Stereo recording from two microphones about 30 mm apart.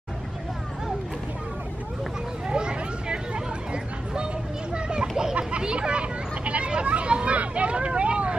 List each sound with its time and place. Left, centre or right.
2.5 s hubbub: right
4.7 s children playing: right
5.6 s a sound: right
7.3 s vehicle: right